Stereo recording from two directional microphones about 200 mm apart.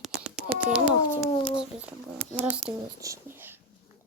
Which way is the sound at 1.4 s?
5° right (ahead or behind).